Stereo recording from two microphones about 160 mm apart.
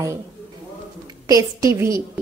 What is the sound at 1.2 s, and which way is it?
Speech, 20° right (ahead or behind).